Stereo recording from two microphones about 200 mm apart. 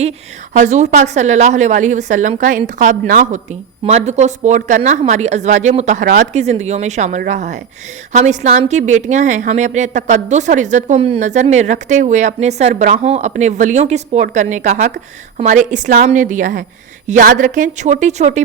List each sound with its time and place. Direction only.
0.5 s a woman's voice: 35° right (ahead or behind)